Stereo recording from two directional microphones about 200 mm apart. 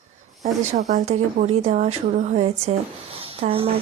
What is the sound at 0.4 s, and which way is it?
Speech, 35° right (ahead or behind).